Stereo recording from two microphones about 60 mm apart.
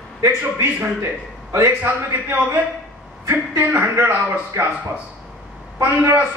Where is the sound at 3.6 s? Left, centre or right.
Right.